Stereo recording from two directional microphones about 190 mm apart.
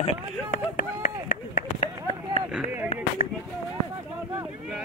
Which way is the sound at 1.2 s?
45° left (ahead or behind).